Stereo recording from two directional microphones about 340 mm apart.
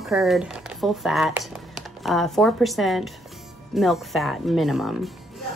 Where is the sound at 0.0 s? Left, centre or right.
Centre.